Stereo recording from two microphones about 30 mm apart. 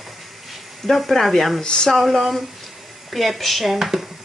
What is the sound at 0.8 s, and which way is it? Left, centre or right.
Speech, centre.